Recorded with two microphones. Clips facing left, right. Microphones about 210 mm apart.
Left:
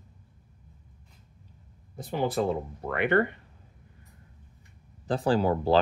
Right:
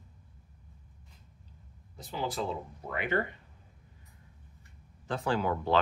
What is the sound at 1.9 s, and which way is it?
Speech, 55° left (ahead or behind).